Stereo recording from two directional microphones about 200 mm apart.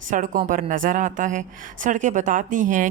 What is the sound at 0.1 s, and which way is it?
Speech, 40° right (ahead or behind).